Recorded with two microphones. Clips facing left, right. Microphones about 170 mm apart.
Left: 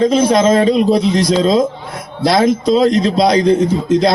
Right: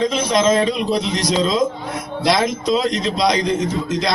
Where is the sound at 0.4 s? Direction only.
35° left (ahead or behind).